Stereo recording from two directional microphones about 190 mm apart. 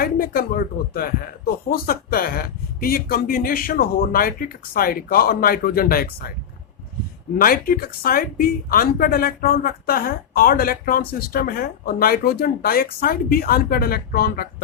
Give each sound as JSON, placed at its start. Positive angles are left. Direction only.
{"t": 0.0, "sound": "speech", "side_deg": 50}
{"t": 7.3, "sound": "speech", "side_deg": 50}